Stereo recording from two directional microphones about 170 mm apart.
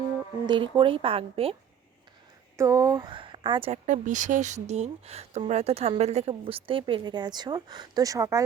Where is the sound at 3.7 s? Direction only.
45° right (ahead or behind).